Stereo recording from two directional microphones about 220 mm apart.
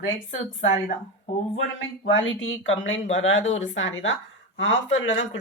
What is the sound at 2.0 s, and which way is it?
A woman's voice, 60° left (ahead or behind).